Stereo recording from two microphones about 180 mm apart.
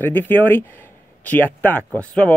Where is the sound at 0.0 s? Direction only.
10° left (ahead or behind).